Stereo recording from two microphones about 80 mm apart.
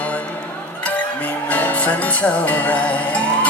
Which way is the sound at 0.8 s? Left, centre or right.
Centre.